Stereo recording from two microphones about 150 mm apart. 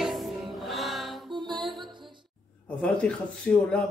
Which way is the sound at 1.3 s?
30° right (ahead or behind).